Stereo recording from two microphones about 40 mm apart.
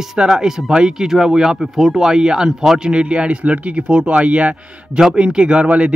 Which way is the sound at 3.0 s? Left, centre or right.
Right.